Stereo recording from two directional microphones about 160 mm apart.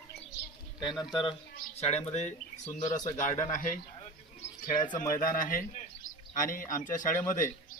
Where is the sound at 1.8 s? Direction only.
40° left (ahead or behind).